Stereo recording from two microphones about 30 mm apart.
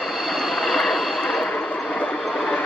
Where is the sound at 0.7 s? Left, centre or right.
Centre.